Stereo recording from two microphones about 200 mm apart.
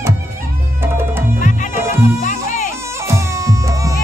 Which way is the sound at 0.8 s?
10° right (ahead or behind).